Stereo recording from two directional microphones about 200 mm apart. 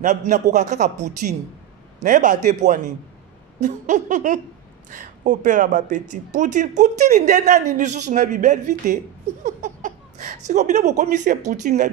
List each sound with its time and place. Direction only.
0.0 s speech: 35° right (ahead or behind)